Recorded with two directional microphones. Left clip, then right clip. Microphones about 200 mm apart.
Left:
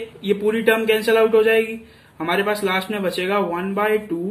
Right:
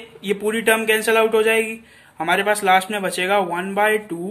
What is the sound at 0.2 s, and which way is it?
A man's voice, 40° right (ahead or behind).